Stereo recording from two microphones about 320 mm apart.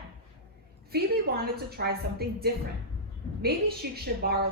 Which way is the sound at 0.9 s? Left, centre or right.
Right.